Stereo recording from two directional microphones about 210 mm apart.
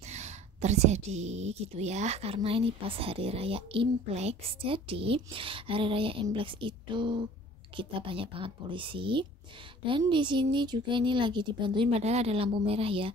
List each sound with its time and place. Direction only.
0.1 s a woman's voice: 35° right (ahead or behind)